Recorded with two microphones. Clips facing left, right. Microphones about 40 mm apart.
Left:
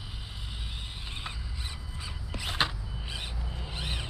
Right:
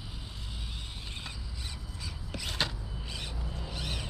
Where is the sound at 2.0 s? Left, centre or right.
Left.